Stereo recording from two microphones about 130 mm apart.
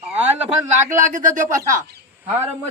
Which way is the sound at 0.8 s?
20° right (ahead or behind).